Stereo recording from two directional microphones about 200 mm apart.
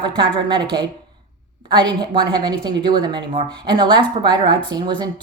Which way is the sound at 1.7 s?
20° right (ahead or behind).